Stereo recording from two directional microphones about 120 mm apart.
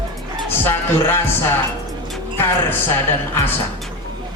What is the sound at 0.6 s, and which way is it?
Speech, 20° left (ahead or behind).